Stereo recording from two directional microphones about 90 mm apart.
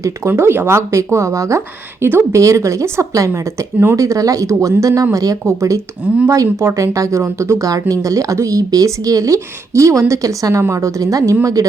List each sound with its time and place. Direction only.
0.0 s speech: 30° right (ahead or behind)